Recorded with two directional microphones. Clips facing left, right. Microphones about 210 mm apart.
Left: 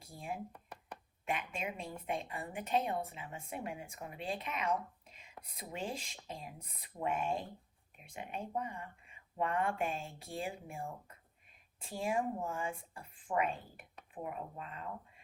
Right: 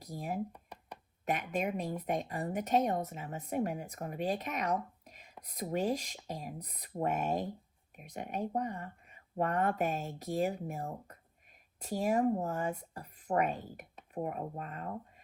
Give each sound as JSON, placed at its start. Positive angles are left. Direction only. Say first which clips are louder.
{"t": 0.0, "sound": "speech", "louder": "right 5 dB", "side_deg": -40}
{"t": 0.5, "sound": "a sound", "louder": "right 1 dB", "side_deg": -15}
{"t": 1.2, "sound": "speech", "louder": "right 6 dB", "side_deg": -40}